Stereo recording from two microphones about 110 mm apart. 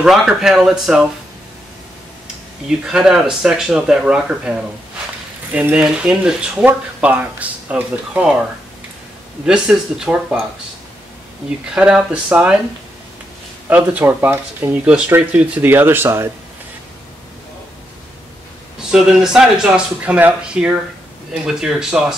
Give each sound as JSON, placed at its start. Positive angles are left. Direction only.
{"t": 0.0, "sound": "speech", "side_deg": -5}
{"t": 2.8, "sound": "speech", "side_deg": -5}
{"t": 9.5, "sound": "speech", "side_deg": -5}
{"t": 11.6, "sound": "speech", "side_deg": -10}
{"t": 13.7, "sound": "speech", "side_deg": -15}
{"t": 18.9, "sound": "speech", "side_deg": -5}